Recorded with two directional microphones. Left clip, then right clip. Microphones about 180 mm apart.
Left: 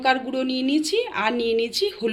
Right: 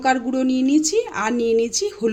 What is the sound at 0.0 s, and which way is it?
A woman's voice, 60° right (ahead or behind).